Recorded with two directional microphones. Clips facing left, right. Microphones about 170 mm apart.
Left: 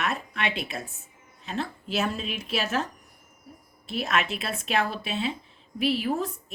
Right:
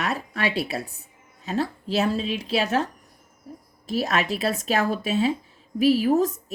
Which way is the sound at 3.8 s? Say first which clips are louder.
Right 4 dB; 40° right (ahead or behind).